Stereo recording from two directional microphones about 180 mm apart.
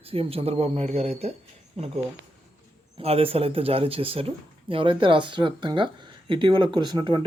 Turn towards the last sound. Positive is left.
turn(degrees=-25)  # may be behind; listen again after turning